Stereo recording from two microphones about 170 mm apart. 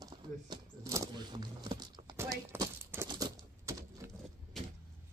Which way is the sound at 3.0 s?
20° right (ahead or behind).